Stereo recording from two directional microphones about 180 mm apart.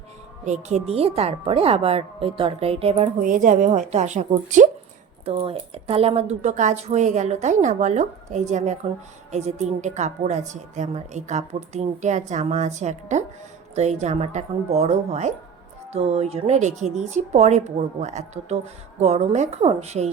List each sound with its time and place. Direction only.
0.4 s a woman's voice: 40° right (ahead or behind)
3.2 s a woman's voice: 45° right (ahead or behind)
5.2 s a woman's voice: 30° right (ahead or behind)